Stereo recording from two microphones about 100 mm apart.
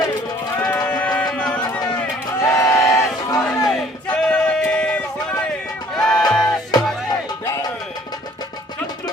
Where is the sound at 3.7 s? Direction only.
10° left (ahead or behind).